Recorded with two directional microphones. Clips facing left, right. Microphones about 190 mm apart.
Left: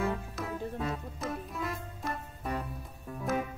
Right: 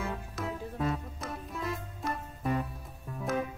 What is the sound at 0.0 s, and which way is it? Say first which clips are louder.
Music: left 3 dB; centre (ahead or behind).